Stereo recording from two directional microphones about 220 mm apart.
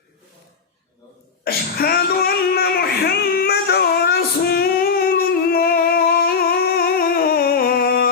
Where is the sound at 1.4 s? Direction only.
45° left (ahead or behind).